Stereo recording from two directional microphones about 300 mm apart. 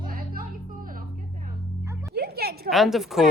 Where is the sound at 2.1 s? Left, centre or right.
Right.